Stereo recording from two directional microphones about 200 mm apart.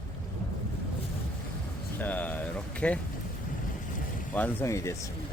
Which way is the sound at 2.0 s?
10° left (ahead or behind).